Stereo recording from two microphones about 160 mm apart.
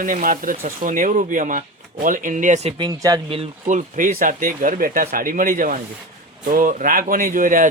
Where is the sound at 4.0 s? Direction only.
55° right (ahead or behind).